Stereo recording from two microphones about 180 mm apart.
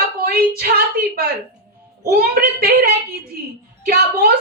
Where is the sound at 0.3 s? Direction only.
55° right (ahead or behind).